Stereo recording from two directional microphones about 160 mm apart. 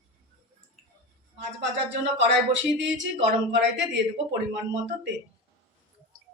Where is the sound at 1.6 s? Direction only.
90° right.